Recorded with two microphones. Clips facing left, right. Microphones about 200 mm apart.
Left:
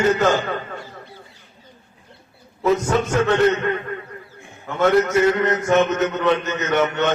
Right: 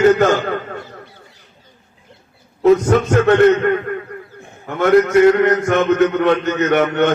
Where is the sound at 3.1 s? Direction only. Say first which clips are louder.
Right 6 dB; 55° right (ahead or behind).